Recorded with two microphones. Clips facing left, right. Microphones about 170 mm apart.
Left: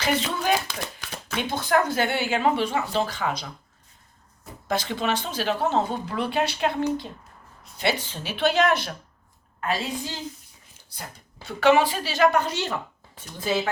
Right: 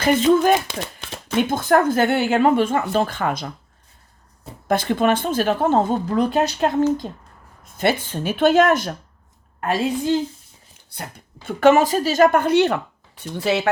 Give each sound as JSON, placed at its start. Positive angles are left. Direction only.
{"t": 0.0, "sound": "speech", "side_deg": -50}
{"t": 0.7, "sound": "a sound", "side_deg": -25}
{"t": 1.4, "sound": "speech", "side_deg": -50}
{"t": 4.7, "sound": "speech", "side_deg": -55}
{"t": 11.4, "sound": "speech", "side_deg": -45}